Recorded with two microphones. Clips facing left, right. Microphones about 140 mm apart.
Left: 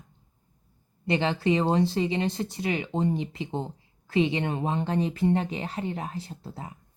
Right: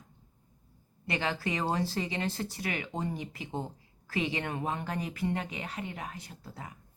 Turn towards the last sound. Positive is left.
turn(degrees=25)  # may be behind; listen again after turning